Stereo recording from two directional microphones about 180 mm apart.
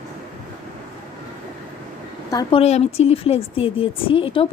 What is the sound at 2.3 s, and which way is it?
Speech, 20° left (ahead or behind).